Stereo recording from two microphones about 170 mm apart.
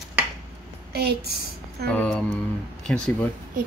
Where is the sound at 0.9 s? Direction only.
70° right (ahead or behind).